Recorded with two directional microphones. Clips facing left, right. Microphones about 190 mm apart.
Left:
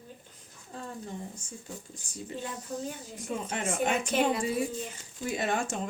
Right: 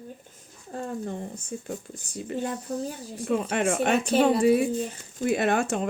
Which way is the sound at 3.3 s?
65° right (ahead or behind).